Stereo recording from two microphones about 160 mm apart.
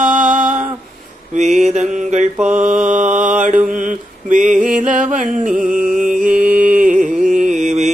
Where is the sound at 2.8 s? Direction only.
50° right (ahead or behind).